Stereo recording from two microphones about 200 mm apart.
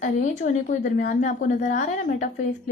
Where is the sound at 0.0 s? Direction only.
40° left (ahead or behind).